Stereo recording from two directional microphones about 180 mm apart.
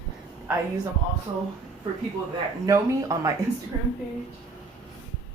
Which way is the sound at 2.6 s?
15° right (ahead or behind).